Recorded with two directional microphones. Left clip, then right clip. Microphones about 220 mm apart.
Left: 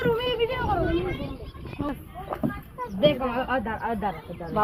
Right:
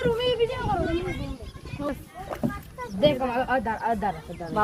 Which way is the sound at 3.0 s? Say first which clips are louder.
Even; 90° right.